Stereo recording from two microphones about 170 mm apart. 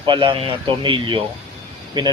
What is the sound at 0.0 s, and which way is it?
A man's voice, 30° right (ahead or behind).